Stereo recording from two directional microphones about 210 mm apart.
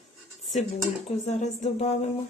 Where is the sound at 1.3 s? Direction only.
35° left (ahead or behind).